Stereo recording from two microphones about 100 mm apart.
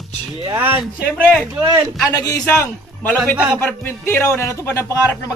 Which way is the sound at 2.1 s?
35° left (ahead or behind).